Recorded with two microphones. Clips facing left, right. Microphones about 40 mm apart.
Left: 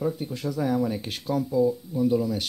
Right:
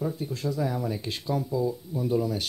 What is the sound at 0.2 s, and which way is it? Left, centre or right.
Speech, left.